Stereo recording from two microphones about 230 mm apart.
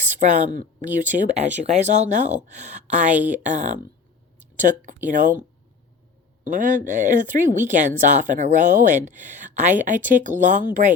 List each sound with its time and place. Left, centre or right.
0.1 s speech: right
5.0 s speech: right
6.5 s speech: right